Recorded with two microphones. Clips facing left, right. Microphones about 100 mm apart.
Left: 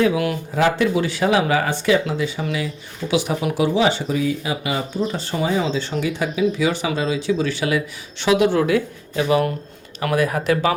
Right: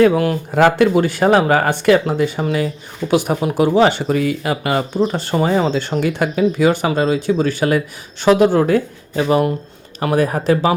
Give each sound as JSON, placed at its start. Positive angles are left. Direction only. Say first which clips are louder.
{"t": 0.0, "sound": "speech", "louder": "right 6 dB", "side_deg": -40}
{"t": 0.5, "sound": "speech", "louder": "right 6 dB", "side_deg": -55}